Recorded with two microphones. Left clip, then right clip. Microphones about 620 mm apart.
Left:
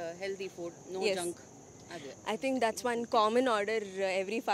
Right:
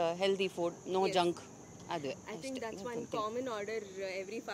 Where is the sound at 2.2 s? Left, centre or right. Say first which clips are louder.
Left 10 dB; left.